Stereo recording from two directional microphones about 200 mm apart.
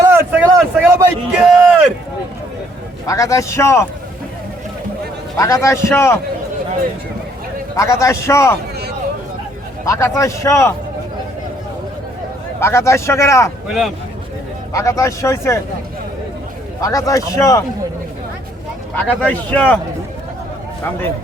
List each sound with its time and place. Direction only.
0.0 s a sound: 10° right (ahead or behind)
3.1 s speech: 15° left (ahead or behind)
5.4 s speech: 15° left (ahead or behind)
7.8 s speech: 15° left (ahead or behind)
9.8 s speech: 15° left (ahead or behind)
12.5 s speech: 15° left (ahead or behind)
13.7 s speech: centre (ahead or behind)
14.7 s speech: 15° left (ahead or behind)
16.8 s speech: 15° left (ahead or behind)
18.9 s speech: 10° left (ahead or behind)